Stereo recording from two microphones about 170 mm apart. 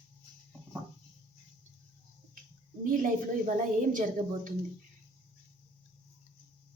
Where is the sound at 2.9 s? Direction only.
55° right (ahead or behind).